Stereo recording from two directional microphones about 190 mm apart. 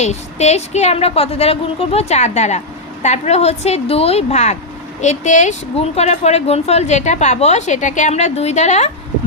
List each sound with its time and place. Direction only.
0.0 s speech: 35° left (ahead or behind)